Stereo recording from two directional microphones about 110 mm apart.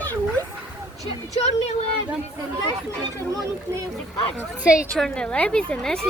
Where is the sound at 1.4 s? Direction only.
85° left.